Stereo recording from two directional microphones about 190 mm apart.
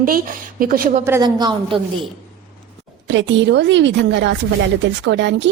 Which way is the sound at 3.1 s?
70° right (ahead or behind).